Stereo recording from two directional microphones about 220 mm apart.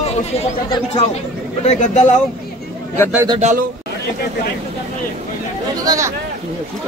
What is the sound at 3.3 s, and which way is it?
Speech, 30° right (ahead or behind).